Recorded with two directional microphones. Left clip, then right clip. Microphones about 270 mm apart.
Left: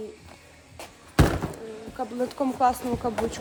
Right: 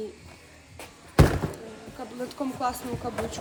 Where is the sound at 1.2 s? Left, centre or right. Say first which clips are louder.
Right 1 dB; centre.